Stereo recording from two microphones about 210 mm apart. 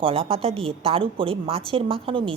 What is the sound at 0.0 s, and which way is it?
A woman's voice, 25° right (ahead or behind).